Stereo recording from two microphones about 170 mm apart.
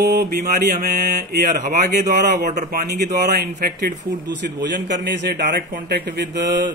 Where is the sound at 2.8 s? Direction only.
75° right (ahead or behind).